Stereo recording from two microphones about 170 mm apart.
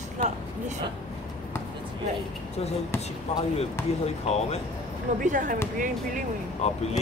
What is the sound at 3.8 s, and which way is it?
Speech, 15° left (ahead or behind).